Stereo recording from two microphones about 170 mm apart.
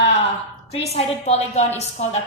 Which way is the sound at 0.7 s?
35° left (ahead or behind).